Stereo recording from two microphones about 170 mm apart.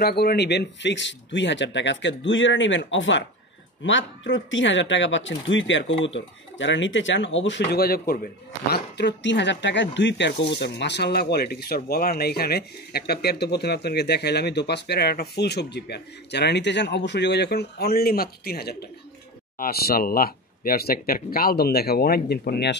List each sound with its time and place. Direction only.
0.0 s speech: 70° left (ahead or behind)